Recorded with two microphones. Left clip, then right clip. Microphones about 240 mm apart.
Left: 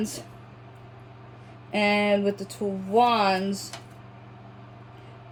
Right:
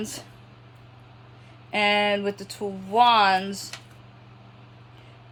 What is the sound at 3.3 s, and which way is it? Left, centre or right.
Speech, centre.